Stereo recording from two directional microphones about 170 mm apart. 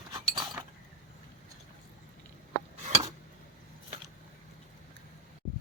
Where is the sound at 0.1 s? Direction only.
25° right (ahead or behind).